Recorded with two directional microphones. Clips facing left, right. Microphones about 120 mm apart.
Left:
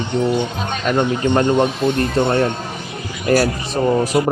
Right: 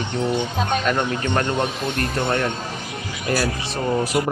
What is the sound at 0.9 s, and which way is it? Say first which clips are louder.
Speech: left 5 dB; 20° left (ahead or behind).